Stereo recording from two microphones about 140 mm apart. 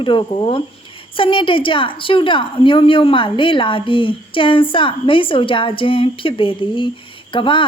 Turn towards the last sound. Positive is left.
turn(degrees=35)  # may be behind; listen again after turning